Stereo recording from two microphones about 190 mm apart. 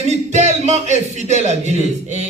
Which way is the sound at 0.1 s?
35° right (ahead or behind).